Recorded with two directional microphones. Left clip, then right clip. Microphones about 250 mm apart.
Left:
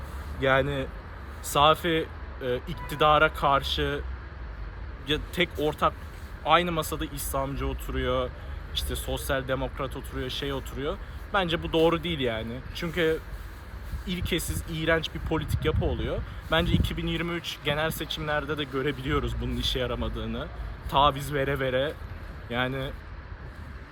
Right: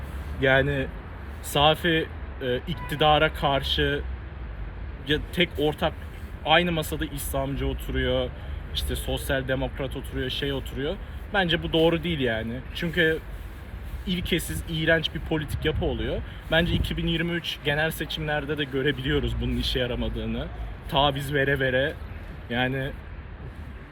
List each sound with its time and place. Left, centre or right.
0.6 s speech: left
5.0 s speech: left